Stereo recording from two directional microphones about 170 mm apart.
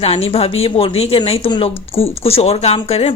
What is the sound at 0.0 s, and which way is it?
Speech, 35° left (ahead or behind).